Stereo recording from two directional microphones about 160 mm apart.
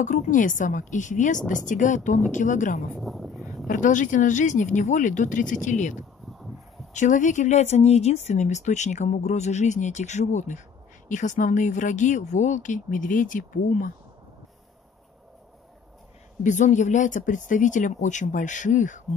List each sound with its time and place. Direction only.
0.0 s speech: 50° left (ahead or behind)
2.9 s speech: centre (ahead or behind)
3.6 s speech: 55° left (ahead or behind)
16.4 s speech: 50° left (ahead or behind)